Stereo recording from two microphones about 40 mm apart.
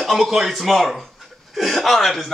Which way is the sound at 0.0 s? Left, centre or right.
Centre.